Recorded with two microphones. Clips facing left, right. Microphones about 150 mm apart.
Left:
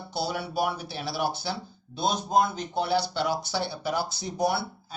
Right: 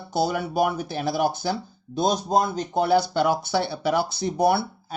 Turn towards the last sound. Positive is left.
turn(degrees=-60)  # may be behind; listen again after turning